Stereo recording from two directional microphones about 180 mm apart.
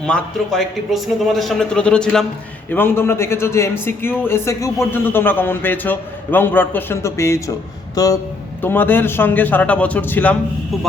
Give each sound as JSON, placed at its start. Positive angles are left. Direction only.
{"t": 0.0, "sound": "a man's voice", "side_deg": 5}